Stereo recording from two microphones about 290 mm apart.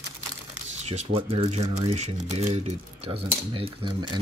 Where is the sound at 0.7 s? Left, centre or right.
Right.